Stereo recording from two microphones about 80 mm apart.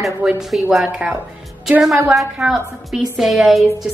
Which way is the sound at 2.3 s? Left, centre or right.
Centre.